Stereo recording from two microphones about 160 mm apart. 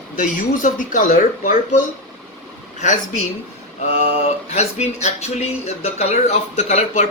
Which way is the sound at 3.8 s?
40° left (ahead or behind).